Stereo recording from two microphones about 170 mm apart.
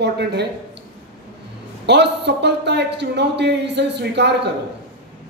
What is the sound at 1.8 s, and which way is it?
A man's voice, 85° right.